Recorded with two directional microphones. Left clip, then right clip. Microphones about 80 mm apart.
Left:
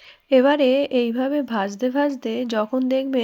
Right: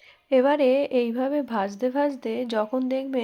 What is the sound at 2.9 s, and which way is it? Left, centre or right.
Speech, left.